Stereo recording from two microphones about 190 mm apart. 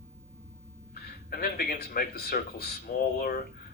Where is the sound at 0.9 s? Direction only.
55° left (ahead or behind).